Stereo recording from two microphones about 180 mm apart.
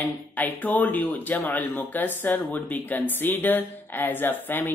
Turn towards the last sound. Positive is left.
turn(degrees=10)  # may be behind; listen again after turning